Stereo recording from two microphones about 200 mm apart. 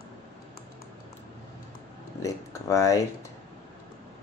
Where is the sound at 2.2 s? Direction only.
15° left (ahead or behind).